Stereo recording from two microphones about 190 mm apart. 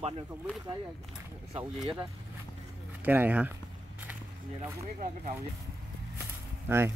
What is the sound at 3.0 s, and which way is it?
Speech, 10° right (ahead or behind).